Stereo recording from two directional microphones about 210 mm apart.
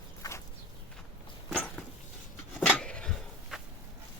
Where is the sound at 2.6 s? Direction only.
5° left (ahead or behind).